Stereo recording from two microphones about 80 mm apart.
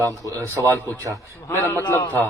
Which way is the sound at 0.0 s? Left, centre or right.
Right.